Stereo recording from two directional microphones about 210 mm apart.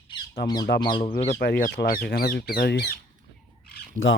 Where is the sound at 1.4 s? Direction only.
45° left (ahead or behind).